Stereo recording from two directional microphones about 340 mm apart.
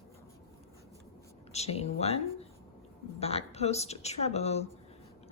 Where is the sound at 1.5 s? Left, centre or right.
Centre.